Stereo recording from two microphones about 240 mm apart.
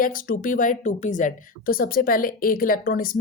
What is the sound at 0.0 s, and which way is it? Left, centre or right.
A woman's voice, left.